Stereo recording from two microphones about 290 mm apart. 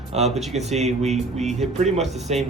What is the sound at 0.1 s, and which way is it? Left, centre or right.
Speech, right.